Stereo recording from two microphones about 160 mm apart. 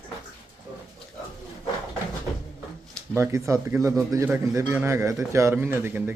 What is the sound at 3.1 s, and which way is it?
A man's voice, 15° right (ahead or behind).